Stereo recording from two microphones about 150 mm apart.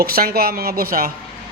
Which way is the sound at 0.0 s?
85° right.